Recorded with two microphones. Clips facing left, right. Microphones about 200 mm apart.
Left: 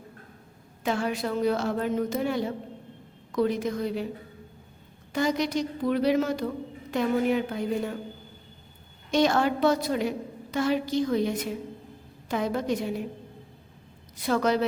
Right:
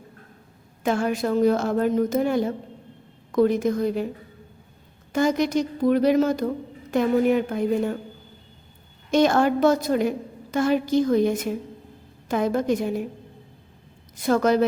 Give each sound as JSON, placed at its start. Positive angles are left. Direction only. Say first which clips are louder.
{"t": 0.9, "sound": "a woman's voice", "louder": "right 5 dB", "side_deg": -50}
{"t": 5.1, "sound": "a woman's voice", "louder": "right 5 dB", "side_deg": -50}
{"t": 9.1, "sound": "a woman's voice", "louder": "right 4 dB", "side_deg": -50}
{"t": 14.2, "sound": "a woman's voice", "louder": "right 5 dB", "side_deg": -45}